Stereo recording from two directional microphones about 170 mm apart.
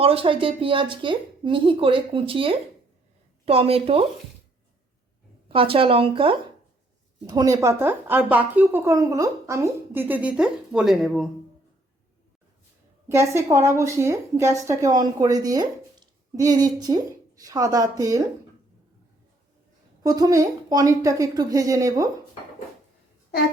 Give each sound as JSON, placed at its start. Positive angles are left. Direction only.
{"t": 0.0, "sound": "a woman's voice", "side_deg": -35}
{"t": 5.5, "sound": "a woman's voice", "side_deg": -30}
{"t": 7.3, "sound": "a woman's voice", "side_deg": -20}
{"t": 13.1, "sound": "a woman's voice", "side_deg": -15}
{"t": 20.0, "sound": "a woman's voice", "side_deg": -20}